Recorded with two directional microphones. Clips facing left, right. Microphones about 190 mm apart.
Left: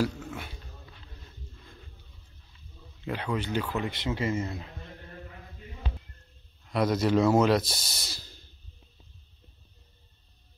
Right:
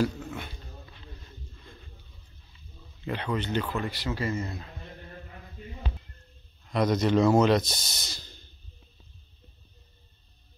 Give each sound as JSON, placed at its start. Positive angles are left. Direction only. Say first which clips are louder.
{"t": 0.0, "sound": "dog", "louder": "right 1 dB", "side_deg": 5}
{"t": 3.1, "sound": "speech", "louder": "right 1 dB", "side_deg": 5}
{"t": 6.7, "sound": "speech", "louder": "right 1 dB", "side_deg": 5}